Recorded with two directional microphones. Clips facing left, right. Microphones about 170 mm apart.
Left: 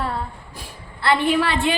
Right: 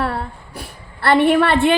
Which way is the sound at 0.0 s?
65° right (ahead or behind).